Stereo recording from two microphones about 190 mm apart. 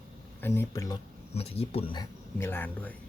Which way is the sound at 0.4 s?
10° left (ahead or behind).